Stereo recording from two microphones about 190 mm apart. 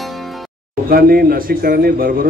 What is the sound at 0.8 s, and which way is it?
A man's voice, 50° right (ahead or behind).